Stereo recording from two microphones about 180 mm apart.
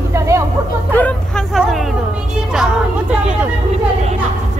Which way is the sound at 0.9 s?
5° left (ahead or behind).